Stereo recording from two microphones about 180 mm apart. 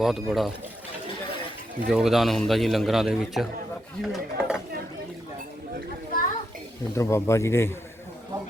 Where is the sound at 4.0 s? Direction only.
Centre (ahead or behind).